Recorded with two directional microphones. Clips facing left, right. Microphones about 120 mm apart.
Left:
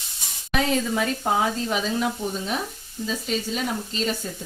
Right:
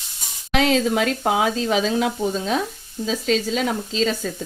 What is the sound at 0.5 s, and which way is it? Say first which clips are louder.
Speech: right 5 dB; 85° right.